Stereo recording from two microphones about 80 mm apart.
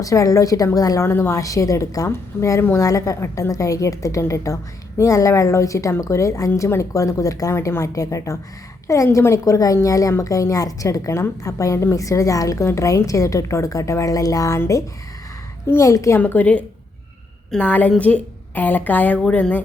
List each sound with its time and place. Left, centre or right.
0.0 s a woman's voice: left
1.0 s speech: left
1.4 s a woman's voice: left
7.5 s a woman's voice: left
15.6 s speech: left
16.1 s a woman's voice: left